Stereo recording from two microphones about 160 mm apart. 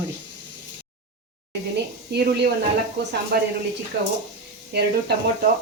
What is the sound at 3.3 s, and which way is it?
Speech, 80° right.